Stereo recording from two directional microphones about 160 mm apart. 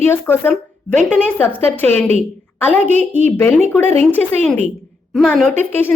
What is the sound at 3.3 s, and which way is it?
Speech, 15° left (ahead or behind).